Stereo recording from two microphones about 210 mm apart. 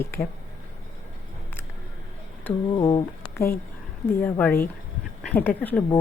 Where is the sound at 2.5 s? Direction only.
5° left (ahead or behind).